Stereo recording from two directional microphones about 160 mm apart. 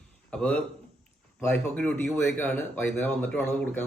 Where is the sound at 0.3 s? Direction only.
5° left (ahead or behind).